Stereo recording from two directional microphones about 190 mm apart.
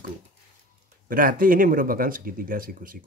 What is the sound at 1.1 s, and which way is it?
Speech, 50° right (ahead or behind).